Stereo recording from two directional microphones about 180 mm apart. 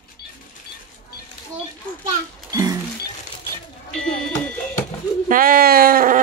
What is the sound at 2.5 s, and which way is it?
Music, 15° right (ahead or behind).